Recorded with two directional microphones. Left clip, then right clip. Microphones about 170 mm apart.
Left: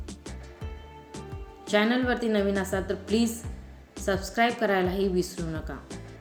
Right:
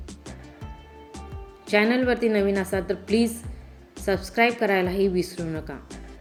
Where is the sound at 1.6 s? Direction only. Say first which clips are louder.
Right 3 dB; 15° right (ahead or behind).